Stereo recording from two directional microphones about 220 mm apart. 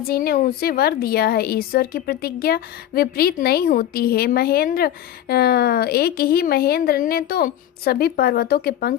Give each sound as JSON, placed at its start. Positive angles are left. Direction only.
{"t": 0.1, "sound": "a woman's voice", "side_deg": 45}